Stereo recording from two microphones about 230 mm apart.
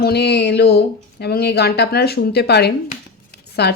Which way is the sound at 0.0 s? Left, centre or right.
Left.